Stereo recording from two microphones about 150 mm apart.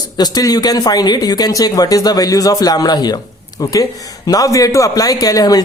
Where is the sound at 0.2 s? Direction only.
25° left (ahead or behind).